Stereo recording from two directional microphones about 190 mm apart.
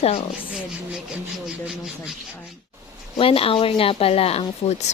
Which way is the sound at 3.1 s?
30° left (ahead or behind).